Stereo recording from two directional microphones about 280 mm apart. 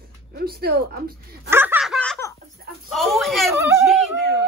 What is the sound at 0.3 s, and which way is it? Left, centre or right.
A woman's voice, right.